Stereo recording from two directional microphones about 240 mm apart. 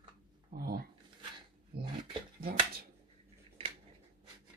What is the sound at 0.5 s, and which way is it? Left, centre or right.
Speech, right.